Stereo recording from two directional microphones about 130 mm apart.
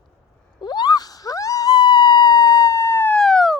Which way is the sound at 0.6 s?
35° left (ahead or behind).